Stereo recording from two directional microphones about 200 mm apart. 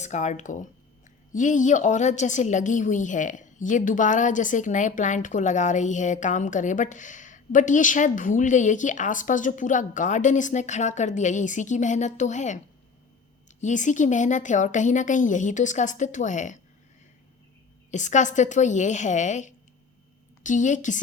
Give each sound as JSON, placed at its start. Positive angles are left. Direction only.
{"t": 0.0, "sound": "a woman's voice", "side_deg": 35}
{"t": 17.9, "sound": "a woman's voice", "side_deg": 40}